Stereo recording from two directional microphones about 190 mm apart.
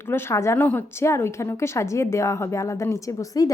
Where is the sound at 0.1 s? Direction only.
15° left (ahead or behind).